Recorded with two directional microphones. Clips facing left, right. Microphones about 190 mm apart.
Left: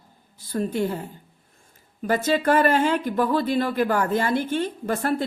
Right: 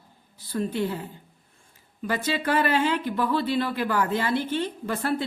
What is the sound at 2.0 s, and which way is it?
Speech, 45° left (ahead or behind).